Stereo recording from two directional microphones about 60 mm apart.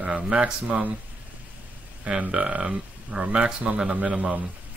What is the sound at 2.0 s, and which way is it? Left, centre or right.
Speech, centre.